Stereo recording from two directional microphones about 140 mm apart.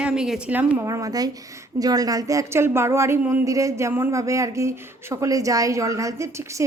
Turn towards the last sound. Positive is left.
turn(degrees=-20)  # may be behind; listen again after turning